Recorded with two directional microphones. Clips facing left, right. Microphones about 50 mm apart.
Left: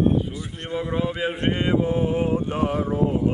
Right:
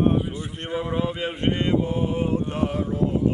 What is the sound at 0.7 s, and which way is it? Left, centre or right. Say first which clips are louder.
Speech: left 1 dB; centre.